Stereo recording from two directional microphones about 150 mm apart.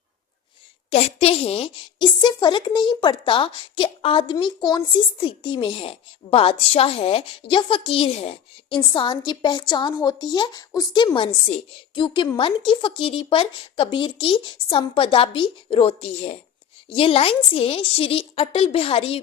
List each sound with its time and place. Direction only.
0.9 s a woman's voice: 40° left (ahead or behind)
8.9 s a woman's voice: 30° left (ahead or behind)